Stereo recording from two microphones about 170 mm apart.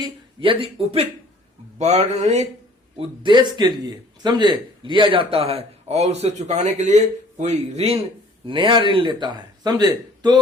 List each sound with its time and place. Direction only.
0.0 s speech: 30° right (ahead or behind)
3.0 s speech: 25° right (ahead or behind)